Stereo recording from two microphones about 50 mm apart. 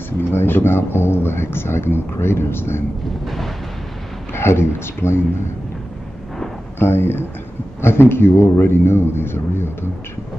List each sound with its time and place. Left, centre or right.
0.3 s a sound: left
3.3 s eruption: centre
4.3 s speech: left
6.8 s a man's voice: left